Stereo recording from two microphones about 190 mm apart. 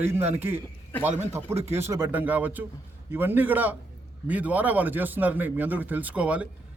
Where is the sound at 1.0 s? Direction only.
35° right (ahead or behind).